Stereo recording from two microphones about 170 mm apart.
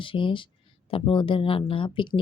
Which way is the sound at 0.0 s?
30° left (ahead or behind).